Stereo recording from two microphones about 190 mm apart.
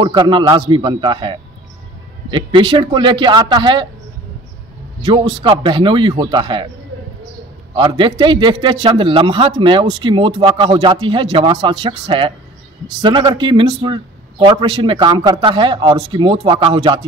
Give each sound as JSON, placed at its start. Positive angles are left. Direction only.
{"t": 0.0, "sound": "a man's voice", "side_deg": -25}
{"t": 5.0, "sound": "a man's voice", "side_deg": -25}
{"t": 7.7, "sound": "a man's voice", "side_deg": -25}